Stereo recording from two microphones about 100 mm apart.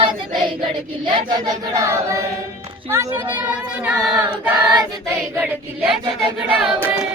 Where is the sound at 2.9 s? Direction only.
30° right (ahead or behind).